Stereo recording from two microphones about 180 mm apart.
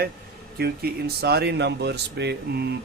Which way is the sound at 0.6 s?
60° right (ahead or behind).